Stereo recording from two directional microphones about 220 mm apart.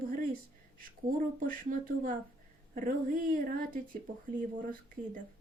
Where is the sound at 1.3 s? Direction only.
40° right (ahead or behind).